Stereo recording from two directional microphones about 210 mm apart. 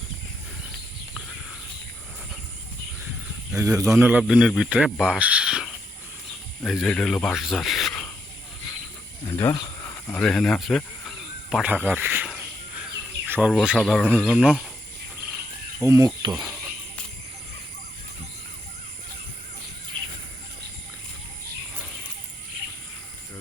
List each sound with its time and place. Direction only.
3.5 s speech: 15° right (ahead or behind)
3.9 s speech: 5° right (ahead or behind)
9.2 s speech: 15° left (ahead or behind)
9.8 s a sound: 5° left (ahead or behind)
13.5 s speech: centre (ahead or behind)
15.8 s speech: 15° right (ahead or behind)
16.3 s speech: 5° right (ahead or behind)